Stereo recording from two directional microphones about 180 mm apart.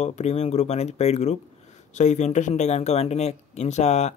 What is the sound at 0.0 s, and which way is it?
Speech, 35° left (ahead or behind).